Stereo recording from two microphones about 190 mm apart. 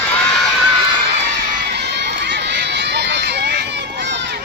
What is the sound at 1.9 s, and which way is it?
Run, 65° right (ahead or behind).